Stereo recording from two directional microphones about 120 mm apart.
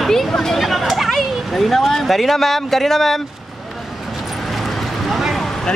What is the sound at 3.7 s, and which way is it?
Vehicle, centre (ahead or behind).